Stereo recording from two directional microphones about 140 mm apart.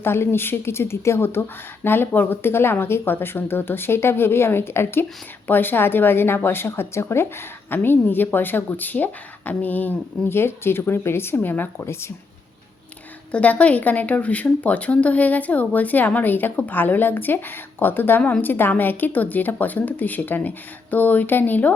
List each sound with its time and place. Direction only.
0.0 s speech: 15° left (ahead or behind)
13.3 s speech: 10° left (ahead or behind)